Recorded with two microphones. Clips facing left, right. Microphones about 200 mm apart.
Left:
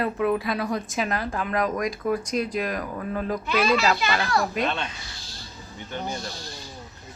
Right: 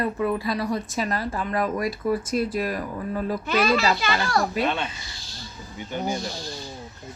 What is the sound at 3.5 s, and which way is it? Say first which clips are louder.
Speech: right 1 dB; 40° right (ahead or behind).